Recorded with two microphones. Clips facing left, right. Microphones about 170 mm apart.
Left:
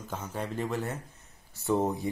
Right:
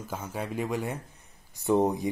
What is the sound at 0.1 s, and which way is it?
Speech, 10° right (ahead or behind).